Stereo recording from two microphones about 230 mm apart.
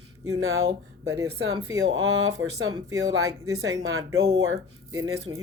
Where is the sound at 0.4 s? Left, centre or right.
Right.